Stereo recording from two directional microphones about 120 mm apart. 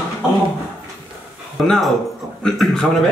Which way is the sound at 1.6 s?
5° left (ahead or behind).